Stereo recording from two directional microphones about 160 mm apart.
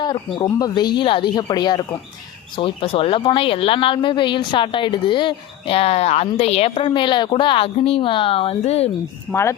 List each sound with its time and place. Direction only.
0.0 s speech: 30° left (ahead or behind)
9.3 s speech: 15° left (ahead or behind)